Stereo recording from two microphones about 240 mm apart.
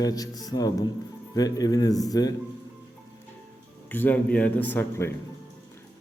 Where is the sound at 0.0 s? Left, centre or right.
Centre.